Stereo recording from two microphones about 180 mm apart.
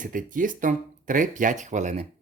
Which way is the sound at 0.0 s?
45° right (ahead or behind).